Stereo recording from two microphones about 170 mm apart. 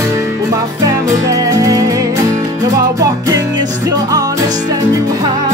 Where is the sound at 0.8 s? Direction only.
20° right (ahead or behind).